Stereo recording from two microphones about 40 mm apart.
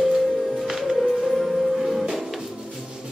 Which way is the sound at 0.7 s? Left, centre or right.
Centre.